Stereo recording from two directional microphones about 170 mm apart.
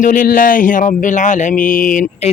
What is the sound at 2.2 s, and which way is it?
Speech, 40° left (ahead or behind).